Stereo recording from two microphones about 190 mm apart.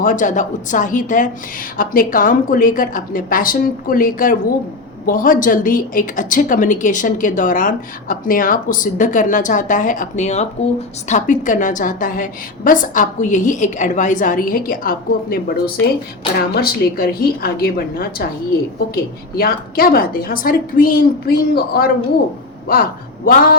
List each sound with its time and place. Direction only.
0.0 s a woman's voice: 45° left (ahead or behind)
19.4 s a woman's voice: 50° left (ahead or behind)